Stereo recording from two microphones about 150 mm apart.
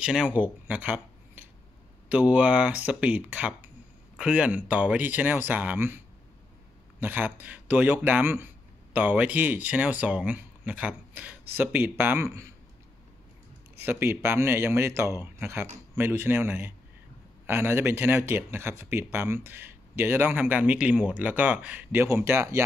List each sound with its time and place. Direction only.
0.0 s speech: 5° right (ahead or behind)
13.7 s speech: 15° right (ahead or behind)